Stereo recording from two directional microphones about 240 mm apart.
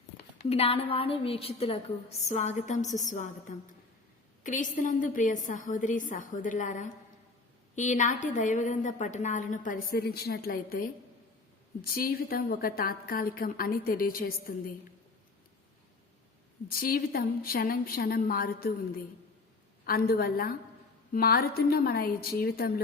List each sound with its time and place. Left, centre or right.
0.4 s a woman's voice: left
16.6 s a woman's voice: left
19.8 s a woman's voice: left